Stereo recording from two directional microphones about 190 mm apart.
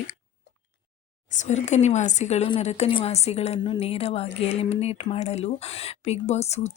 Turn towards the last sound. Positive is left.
turn(degrees=35)  # may be behind; listen again after turning